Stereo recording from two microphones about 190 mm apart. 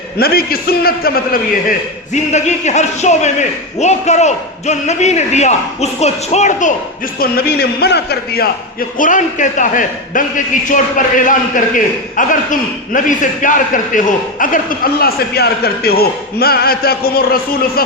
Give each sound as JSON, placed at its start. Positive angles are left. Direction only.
{"t": 0.2, "sound": "a man's voice", "side_deg": 55}
{"t": 2.1, "sound": "a man's voice", "side_deg": 35}
{"t": 7.2, "sound": "speech", "side_deg": 55}
{"t": 9.0, "sound": "a man's voice", "side_deg": 40}